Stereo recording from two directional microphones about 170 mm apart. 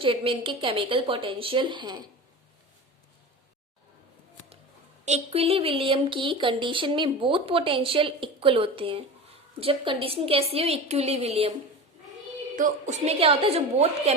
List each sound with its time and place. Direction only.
0.0 s speech: 30° right (ahead or behind)
5.0 s speech: 40° right (ahead or behind)
12.5 s speech: 50° right (ahead or behind)